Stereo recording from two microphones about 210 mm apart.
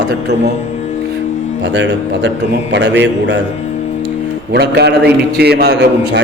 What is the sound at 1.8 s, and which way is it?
A man's voice, 60° right (ahead or behind).